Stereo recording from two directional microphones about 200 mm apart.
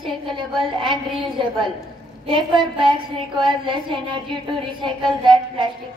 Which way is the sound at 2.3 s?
25° right (ahead or behind).